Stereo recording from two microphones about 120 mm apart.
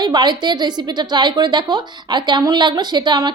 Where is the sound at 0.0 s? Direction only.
35° right (ahead or behind).